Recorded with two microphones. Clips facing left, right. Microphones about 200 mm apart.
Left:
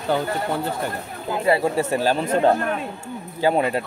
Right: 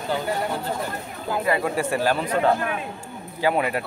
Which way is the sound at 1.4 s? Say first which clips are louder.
Left 4 dB; 25° left (ahead or behind).